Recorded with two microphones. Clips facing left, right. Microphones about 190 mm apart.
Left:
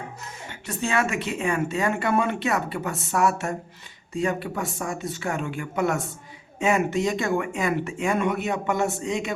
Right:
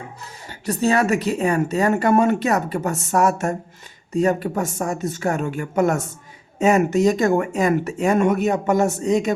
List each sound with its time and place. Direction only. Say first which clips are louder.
0.2 s speech: right 1 dB; 35° right (ahead or behind)